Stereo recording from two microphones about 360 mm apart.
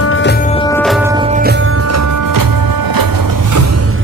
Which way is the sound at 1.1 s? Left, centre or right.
Centre.